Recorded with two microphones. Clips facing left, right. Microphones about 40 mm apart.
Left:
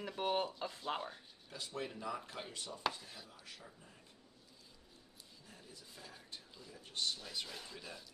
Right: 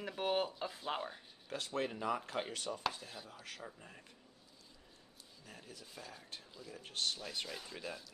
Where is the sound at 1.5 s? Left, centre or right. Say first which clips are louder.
Right 5 dB; right.